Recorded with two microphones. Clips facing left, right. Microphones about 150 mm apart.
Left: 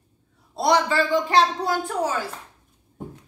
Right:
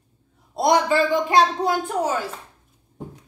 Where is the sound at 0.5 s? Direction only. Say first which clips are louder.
Right 2 dB; 20° right (ahead or behind).